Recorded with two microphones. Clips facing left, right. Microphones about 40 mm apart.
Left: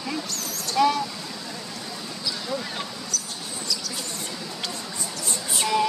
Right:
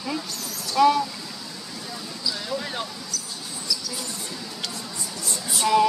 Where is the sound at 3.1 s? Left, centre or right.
Left.